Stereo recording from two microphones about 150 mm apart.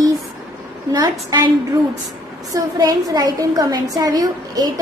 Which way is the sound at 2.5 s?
25° right (ahead or behind).